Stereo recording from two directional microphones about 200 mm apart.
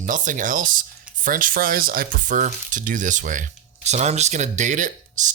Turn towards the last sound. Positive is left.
turn(degrees=-40)  # may be behind; listen again after turning